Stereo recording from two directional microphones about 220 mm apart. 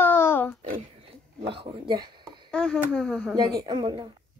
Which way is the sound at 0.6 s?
35° right (ahead or behind).